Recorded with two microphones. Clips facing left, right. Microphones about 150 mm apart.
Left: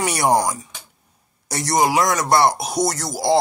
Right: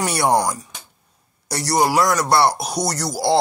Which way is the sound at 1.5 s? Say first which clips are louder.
Even; 20° left (ahead or behind).